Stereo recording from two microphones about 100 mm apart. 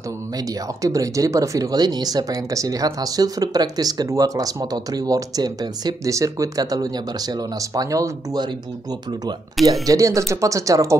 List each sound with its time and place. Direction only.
0.8 s speech: 35° right (ahead or behind)
9.7 s speech: 35° right (ahead or behind)